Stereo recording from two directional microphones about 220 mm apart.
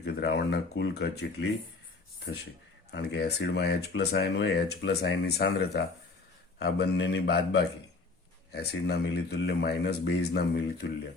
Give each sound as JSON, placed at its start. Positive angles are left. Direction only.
{"t": 0.0, "sound": "speech", "side_deg": 50}
{"t": 2.9, "sound": "speech", "side_deg": 50}